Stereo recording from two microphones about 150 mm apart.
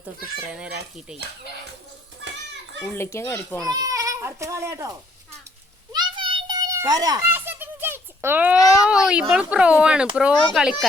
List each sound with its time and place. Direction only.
0.4 s speech: 5° right (ahead or behind)
2.9 s a child's voice: 15° left (ahead or behind)
3.7 s speech: 25° right (ahead or behind)
5.9 s children playing: 30° right (ahead or behind)
7.2 s a sound: 15° right (ahead or behind)
8.8 s speech: 5° right (ahead or behind)